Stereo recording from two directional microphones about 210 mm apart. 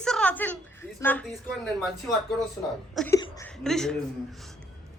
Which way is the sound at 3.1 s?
15° left (ahead or behind).